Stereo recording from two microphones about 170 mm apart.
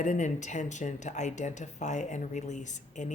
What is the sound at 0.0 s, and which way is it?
Speech, 45° left (ahead or behind).